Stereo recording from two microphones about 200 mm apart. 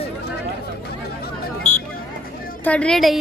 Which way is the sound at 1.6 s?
35° left (ahead or behind).